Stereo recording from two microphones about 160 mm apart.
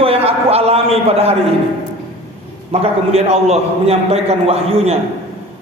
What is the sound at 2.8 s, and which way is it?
A man's voice, 40° right (ahead or behind).